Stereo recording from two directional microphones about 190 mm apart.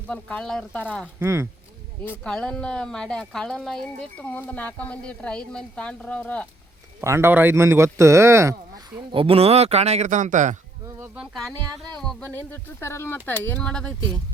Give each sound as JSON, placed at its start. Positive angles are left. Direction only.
{"t": 0.1, "sound": "a woman's voice", "side_deg": 5}
{"t": 1.0, "sound": "speech", "side_deg": -15}
{"t": 2.0, "sound": "a woman's voice", "side_deg": 5}
{"t": 7.0, "sound": "speech", "side_deg": -15}
{"t": 9.0, "sound": "speech", "side_deg": -30}
{"t": 10.8, "sound": "speech", "side_deg": -10}